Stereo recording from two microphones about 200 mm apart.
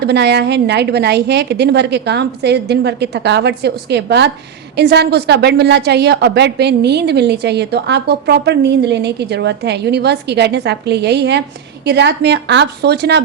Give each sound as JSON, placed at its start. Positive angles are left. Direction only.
{"t": 0.0, "sound": "a woman's voice", "side_deg": -55}